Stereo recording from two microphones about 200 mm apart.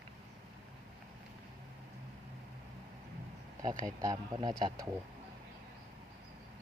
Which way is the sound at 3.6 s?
20° right (ahead or behind).